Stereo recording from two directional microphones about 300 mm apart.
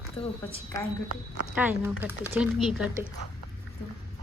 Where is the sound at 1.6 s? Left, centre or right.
Centre.